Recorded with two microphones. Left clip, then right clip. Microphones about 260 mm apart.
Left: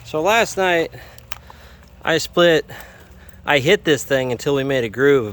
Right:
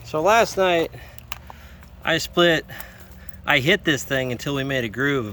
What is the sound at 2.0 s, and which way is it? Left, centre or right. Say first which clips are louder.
Speech: left 3 dB; centre.